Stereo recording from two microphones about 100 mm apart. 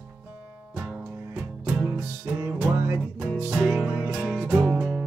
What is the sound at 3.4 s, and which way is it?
Music, 5° right (ahead or behind).